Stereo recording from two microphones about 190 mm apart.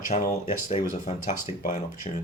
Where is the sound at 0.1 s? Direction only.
40° left (ahead or behind).